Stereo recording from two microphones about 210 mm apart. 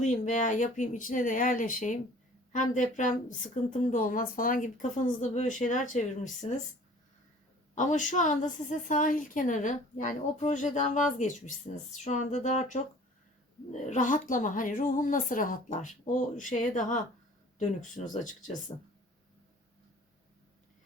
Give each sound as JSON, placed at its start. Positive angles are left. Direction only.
{"t": 0.0, "sound": "speech", "side_deg": 35}
{"t": 7.8, "sound": "speech", "side_deg": 35}
{"t": 13.8, "sound": "speech", "side_deg": 35}